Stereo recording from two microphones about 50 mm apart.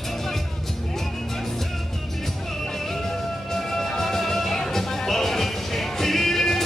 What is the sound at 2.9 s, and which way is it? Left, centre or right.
Music, centre.